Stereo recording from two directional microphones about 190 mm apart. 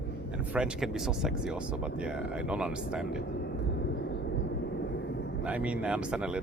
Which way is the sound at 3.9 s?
65° left (ahead or behind).